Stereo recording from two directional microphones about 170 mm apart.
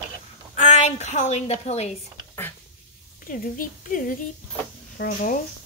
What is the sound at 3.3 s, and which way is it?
A woman's voice, 50° left (ahead or behind).